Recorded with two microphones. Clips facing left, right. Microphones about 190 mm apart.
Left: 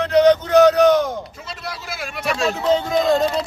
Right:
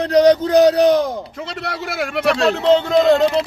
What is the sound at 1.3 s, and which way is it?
Speech, 65° right (ahead or behind).